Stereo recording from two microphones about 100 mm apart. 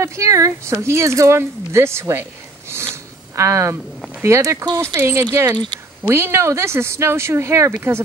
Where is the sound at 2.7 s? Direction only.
25° right (ahead or behind).